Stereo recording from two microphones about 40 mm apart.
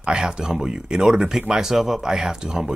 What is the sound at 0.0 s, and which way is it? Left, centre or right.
Speech, right.